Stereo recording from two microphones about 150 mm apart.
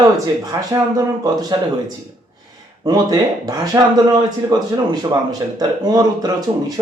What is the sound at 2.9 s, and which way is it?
Speech, 25° right (ahead or behind).